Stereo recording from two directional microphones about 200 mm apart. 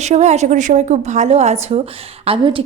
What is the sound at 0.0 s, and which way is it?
A woman's voice, 35° right (ahead or behind).